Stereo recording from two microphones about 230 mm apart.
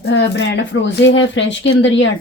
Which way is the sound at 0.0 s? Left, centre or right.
Left.